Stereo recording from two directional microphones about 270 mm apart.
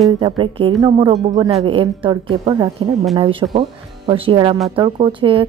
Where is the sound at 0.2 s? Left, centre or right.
Centre.